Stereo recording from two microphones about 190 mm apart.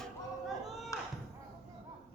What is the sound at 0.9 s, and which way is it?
Slam, 15° left (ahead or behind).